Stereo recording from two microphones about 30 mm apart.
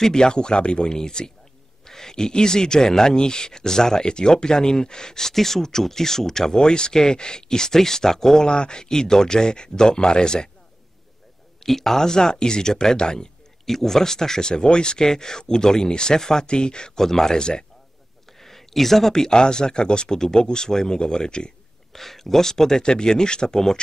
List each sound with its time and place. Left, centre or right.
0.0 s speech: left
0.9 s speech: left
5.3 s speech: centre
8.5 s speech: left
11.6 s speech: centre; by 13.3 s left
13.7 s speech: centre
14.5 s speech: left
17.0 s speech: centre
17.4 s speech: left
18.4 s a sound: centre
19.3 s speech: left
21.9 s speech: centre
22.8 s speech: left